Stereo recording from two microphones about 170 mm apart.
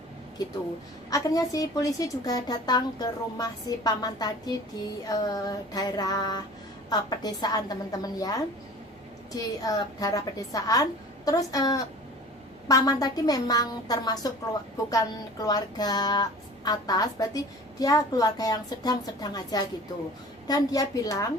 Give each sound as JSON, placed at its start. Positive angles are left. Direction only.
{"t": 1.1, "sound": "a woman's voice", "side_deg": 20}
{"t": 15.4, "sound": "a woman's voice", "side_deg": 20}